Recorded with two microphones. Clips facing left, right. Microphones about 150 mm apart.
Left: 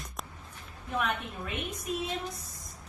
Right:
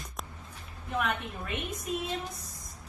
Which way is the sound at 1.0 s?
Centre (ahead or behind).